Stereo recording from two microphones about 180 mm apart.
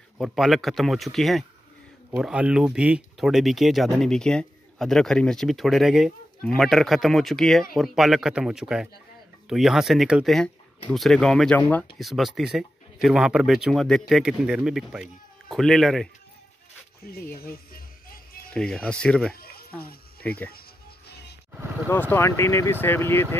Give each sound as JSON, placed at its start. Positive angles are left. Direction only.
{"t": 0.2, "sound": "speech", "side_deg": 0}
{"t": 17.1, "sound": "speech", "side_deg": 60}
{"t": 18.5, "sound": "speech", "side_deg": 5}
{"t": 19.3, "sound": "a sound", "side_deg": 55}
{"t": 19.8, "sound": "insect", "side_deg": 55}
{"t": 20.2, "sound": "speech", "side_deg": 10}
{"t": 21.8, "sound": "speech", "side_deg": 10}